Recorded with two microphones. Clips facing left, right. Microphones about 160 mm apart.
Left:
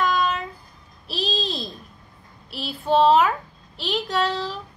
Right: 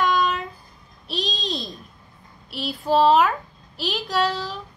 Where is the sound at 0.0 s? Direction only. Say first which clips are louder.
Right 1 dB; centre (ahead or behind).